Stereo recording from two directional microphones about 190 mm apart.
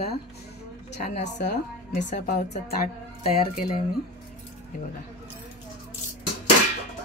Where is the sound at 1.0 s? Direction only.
40° left (ahead or behind).